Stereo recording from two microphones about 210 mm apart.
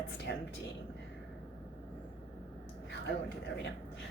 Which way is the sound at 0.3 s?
55° left (ahead or behind).